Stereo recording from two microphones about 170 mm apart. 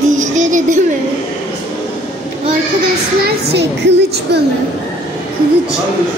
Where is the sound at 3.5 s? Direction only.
75° right (ahead or behind).